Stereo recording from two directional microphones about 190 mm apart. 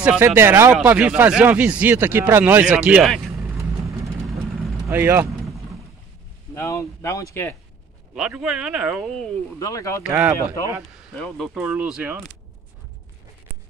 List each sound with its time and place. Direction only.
0.0 s speech: 10° right (ahead or behind)
4.8 s vehicle: 10° right (ahead or behind)
6.5 s speech: 15° left (ahead or behind)
8.1 s speech: 5° right (ahead or behind)
9.6 s speech: 15° left (ahead or behind)
10.0 s speech: 5° right (ahead or behind)